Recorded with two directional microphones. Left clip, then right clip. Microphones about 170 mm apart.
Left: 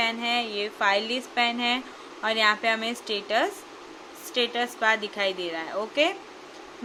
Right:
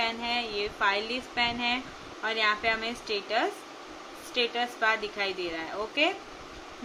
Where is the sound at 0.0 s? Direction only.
25° left (ahead or behind).